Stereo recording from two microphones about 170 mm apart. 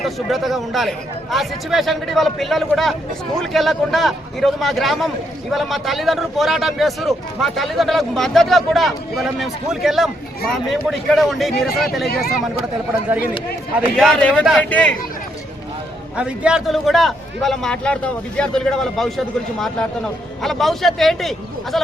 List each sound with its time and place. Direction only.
0.0 s a man's voice: centre (ahead or behind)
11.7 s speech: 60° left (ahead or behind)
13.9 s a man's voice: 5° left (ahead or behind)
16.1 s a man's voice: 5° right (ahead or behind)